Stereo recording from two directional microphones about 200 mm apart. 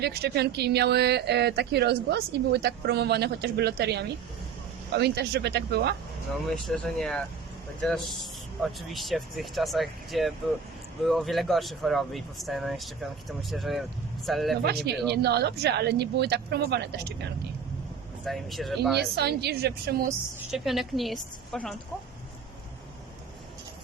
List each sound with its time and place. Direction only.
0.0 s speech: 55° right (ahead or behind)
6.5 s speech: 5° left (ahead or behind)
14.8 s speech: 55° right (ahead or behind)
18.3 s speech: centre (ahead or behind)
18.9 s speech: 55° right (ahead or behind)
20.5 s speech: centre (ahead or behind)